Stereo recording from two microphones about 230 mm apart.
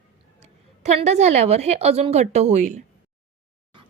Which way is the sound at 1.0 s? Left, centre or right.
Right.